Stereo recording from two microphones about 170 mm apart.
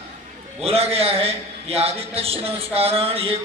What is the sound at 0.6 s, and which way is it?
A man's voice, 35° right (ahead or behind).